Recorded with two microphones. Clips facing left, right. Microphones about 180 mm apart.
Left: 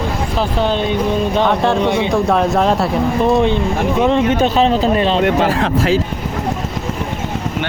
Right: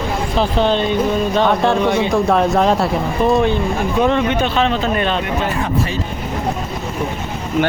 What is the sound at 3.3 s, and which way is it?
Speech, 20° left (ahead or behind).